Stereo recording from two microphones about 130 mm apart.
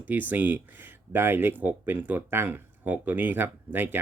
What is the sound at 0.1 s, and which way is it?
Speech, 15° right (ahead or behind).